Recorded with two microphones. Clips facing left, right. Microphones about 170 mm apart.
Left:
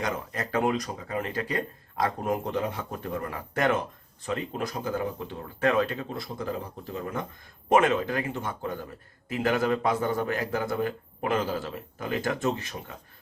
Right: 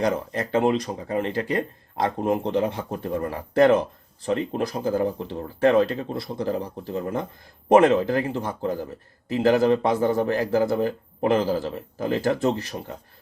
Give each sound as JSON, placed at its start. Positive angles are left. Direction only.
{"t": 0.0, "sound": "speech", "side_deg": -30}